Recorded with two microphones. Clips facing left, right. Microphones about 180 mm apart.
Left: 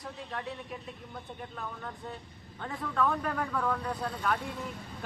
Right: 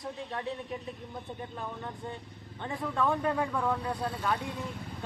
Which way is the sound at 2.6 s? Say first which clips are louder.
Right 1 dB; 20° right (ahead or behind).